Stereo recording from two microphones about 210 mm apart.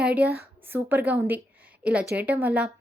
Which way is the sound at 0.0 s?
5° right (ahead or behind).